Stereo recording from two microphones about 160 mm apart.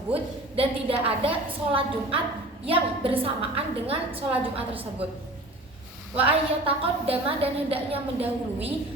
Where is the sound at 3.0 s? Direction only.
35° right (ahead or behind).